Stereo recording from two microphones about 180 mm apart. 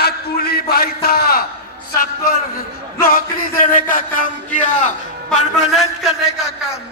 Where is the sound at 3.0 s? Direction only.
55° left (ahead or behind).